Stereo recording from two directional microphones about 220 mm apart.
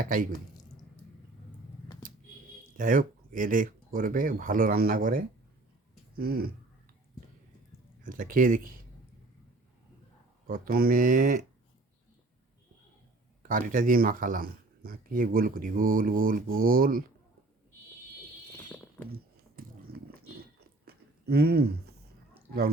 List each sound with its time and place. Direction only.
0.0 s speech: 40° right (ahead or behind)
2.7 s speech: 35° right (ahead or behind)
8.1 s speech: 40° right (ahead or behind)
10.4 s speech: 40° right (ahead or behind)
13.5 s speech: 35° right (ahead or behind)
19.6 s biting: 40° right (ahead or behind)
20.8 s a sound: 45° right (ahead or behind)